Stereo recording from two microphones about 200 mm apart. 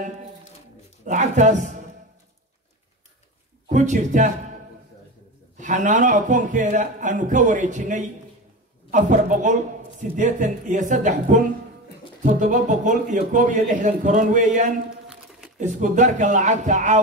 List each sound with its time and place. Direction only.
1.0 s speech: 40° right (ahead or behind)
3.6 s a man's voice: 35° right (ahead or behind)
5.6 s speech: 40° right (ahead or behind)